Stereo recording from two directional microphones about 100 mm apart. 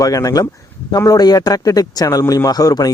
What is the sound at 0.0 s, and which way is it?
Speech, 35° left (ahead or behind).